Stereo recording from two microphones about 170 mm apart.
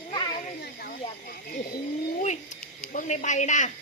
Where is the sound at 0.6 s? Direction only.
65° left (ahead or behind).